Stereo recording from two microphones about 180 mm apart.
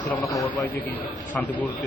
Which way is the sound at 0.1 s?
Centre (ahead or behind).